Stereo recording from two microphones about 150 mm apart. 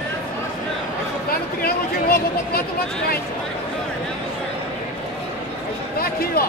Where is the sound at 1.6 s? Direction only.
80° left.